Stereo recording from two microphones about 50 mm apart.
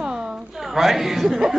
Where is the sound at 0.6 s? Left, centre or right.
Centre.